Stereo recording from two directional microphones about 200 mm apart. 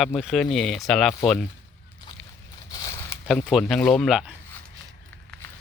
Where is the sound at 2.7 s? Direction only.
15° left (ahead or behind).